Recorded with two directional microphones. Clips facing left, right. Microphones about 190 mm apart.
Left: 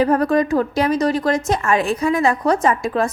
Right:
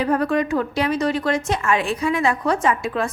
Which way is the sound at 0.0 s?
40° left (ahead or behind).